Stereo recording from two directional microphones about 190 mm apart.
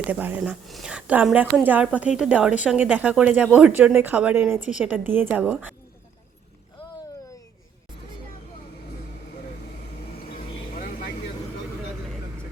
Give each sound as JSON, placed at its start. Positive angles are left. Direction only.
{"t": 0.1, "sound": "speech", "side_deg": -10}
{"t": 10.8, "sound": "vehicle", "side_deg": 45}